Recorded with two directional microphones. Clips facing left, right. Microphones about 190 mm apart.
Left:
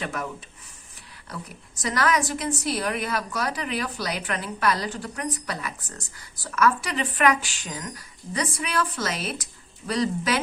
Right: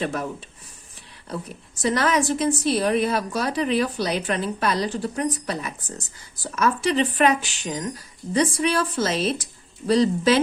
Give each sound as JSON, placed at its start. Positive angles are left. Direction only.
{"t": 0.0, "sound": "a woman's voice", "side_deg": -30}